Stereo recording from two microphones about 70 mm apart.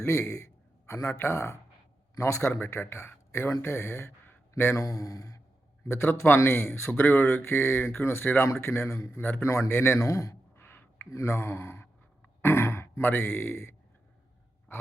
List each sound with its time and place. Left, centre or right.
0.0 s a man's voice: left
2.4 s speech: left
4.9 s speech: left
5.8 s a man's voice: left
10.6 s a sound: left